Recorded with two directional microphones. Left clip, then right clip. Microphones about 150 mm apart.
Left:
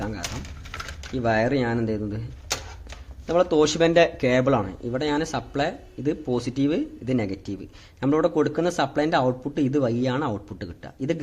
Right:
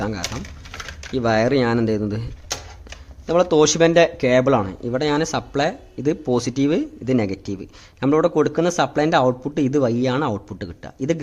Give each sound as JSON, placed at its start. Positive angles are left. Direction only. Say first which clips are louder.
{"t": 1.1, "sound": "speech", "louder": "right 4 dB", "side_deg": -25}
{"t": 3.2, "sound": "speech", "louder": "right 4 dB", "side_deg": -20}